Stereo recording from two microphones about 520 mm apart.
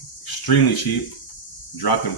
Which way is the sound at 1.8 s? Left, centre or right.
Left.